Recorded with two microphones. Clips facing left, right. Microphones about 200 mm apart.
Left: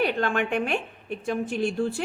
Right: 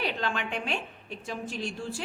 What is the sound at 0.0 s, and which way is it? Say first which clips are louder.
A woman's voice: left 7 dB; 55° left (ahead or behind).